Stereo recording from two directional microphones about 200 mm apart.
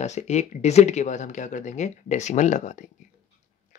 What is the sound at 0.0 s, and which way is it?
Speech, 35° left (ahead or behind).